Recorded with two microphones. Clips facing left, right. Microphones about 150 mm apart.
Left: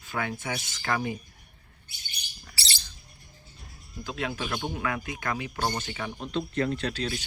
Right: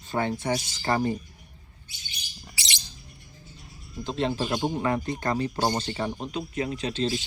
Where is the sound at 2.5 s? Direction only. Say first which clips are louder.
Right 1 dB; 15° right (ahead or behind).